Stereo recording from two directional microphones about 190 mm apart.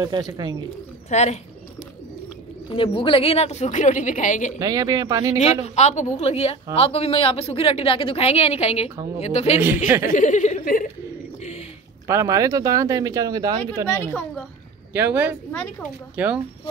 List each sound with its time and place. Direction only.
0.0 s speech: 20° right (ahead or behind)
1.1 s speech: 35° left (ahead or behind)
2.7 s speech: 25° left (ahead or behind)
4.6 s speech: 20° right (ahead or behind)
5.4 s speech: 35° left (ahead or behind)
9.8 s speech: 10° right (ahead or behind)
10.1 s speech: 40° left (ahead or behind)
12.1 s speech: 15° right (ahead or behind)
13.8 s a woman's voice: 15° left (ahead or behind)
14.9 s speech: 10° right (ahead or behind)